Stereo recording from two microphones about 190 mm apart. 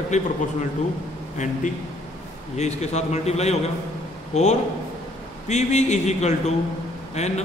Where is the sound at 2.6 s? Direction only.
35° left (ahead or behind).